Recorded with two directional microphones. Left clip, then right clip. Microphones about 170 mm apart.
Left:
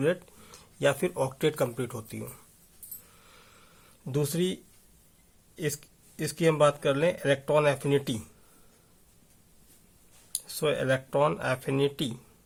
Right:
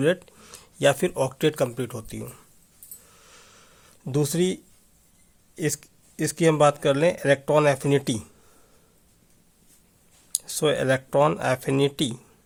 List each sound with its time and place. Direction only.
0.0 s speech: 30° right (ahead or behind)
3.2 s a sound: 30° right (ahead or behind)
5.5 s speech: 35° right (ahead or behind)
10.3 s speech: 40° right (ahead or behind)